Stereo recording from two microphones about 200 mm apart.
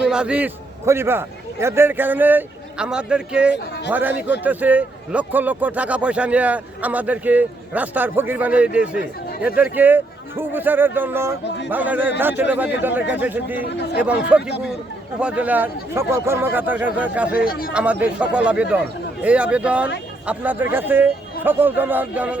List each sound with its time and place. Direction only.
0.0 s a man's voice: 5° right (ahead or behind)
11.4 s speech: 60° left (ahead or behind)
11.7 s a man's voice: 10° right (ahead or behind)
13.7 s speech: 55° left (ahead or behind)
14.3 s a man's voice: 5° right (ahead or behind)
17.4 s speech: 45° left (ahead or behind)
17.7 s a man's voice: 5° right (ahead or behind)